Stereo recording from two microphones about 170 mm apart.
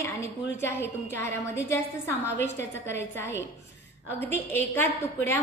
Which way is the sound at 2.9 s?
15° left (ahead or behind).